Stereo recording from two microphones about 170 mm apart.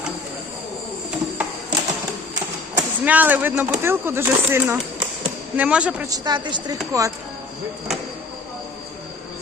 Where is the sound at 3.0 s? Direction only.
10° right (ahead or behind).